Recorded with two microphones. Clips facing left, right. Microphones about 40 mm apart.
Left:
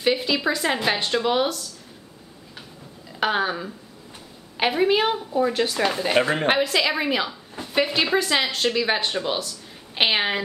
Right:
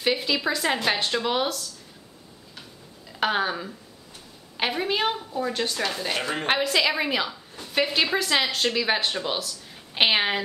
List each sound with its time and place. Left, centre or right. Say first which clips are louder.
0.0 s speech: left 3 dB; centre
3.1 s speech: left 2 dB; centre; by 6.4 s left
6.4 s speech: left 2 dB; centre